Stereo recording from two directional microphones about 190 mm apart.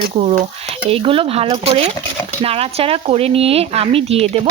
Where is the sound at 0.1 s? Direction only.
30° right (ahead or behind).